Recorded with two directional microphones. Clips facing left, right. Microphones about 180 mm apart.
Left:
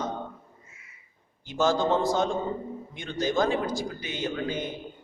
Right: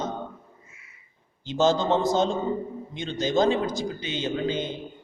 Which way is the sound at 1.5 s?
20° right (ahead or behind).